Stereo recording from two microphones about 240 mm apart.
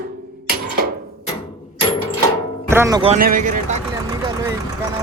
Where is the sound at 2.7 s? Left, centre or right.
Centre.